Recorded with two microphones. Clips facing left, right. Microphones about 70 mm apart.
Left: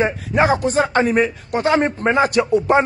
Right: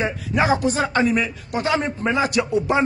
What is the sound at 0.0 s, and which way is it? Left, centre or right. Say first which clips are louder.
A man's voice: left 4 dB; left.